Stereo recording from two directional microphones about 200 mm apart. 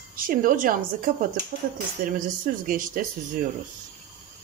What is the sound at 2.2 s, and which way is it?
Speech, 45° right (ahead or behind).